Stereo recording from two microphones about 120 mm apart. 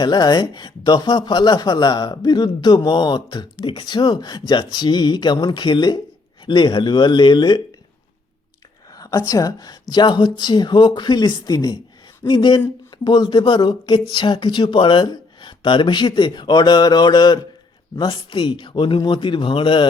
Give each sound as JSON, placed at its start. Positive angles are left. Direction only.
{"t": 0.0, "sound": "speech", "side_deg": 35}
{"t": 9.0, "sound": "a woman's voice", "side_deg": 30}